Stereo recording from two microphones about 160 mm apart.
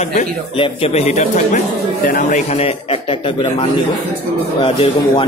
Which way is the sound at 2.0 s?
60° left (ahead or behind).